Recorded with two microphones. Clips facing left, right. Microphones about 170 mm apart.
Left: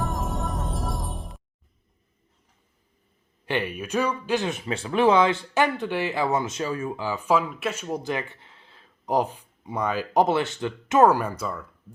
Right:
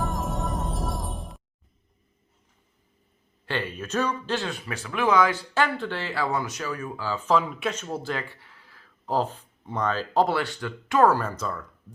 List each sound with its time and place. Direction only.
0.0 s music: centre (ahead or behind)
3.4 s speech: 15° left (ahead or behind)